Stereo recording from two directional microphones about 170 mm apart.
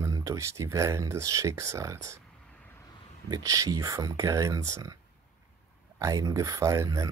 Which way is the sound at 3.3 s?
20° right (ahead or behind).